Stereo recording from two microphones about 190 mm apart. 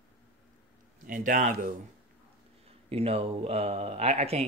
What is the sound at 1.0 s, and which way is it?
Speech, 45° right (ahead or behind).